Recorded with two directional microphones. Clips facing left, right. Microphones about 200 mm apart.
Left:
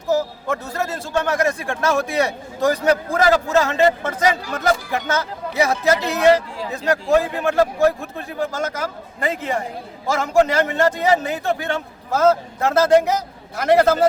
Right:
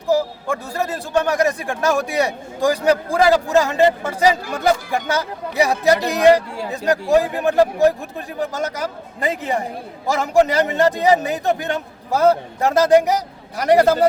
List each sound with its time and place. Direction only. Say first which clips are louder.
0.1 s a man's voice: right 1 dB; 15° right (ahead or behind)